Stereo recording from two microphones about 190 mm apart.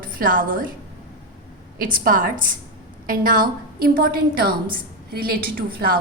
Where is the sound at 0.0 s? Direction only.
50° right (ahead or behind).